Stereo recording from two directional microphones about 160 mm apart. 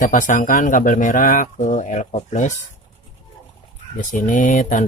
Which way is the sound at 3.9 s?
55° left (ahead or behind).